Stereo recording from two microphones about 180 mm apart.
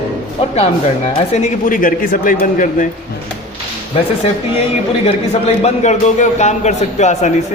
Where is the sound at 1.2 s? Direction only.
40° left (ahead or behind).